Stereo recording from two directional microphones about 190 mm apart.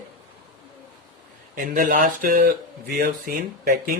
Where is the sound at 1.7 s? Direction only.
45° right (ahead or behind).